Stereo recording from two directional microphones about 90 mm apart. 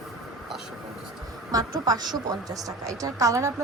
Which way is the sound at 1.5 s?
45° right (ahead or behind).